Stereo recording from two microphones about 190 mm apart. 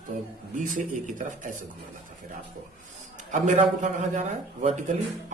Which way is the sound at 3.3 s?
40° right (ahead or behind).